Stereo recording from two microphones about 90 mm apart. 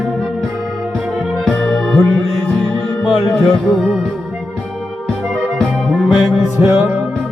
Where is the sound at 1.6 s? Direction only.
10° left (ahead or behind).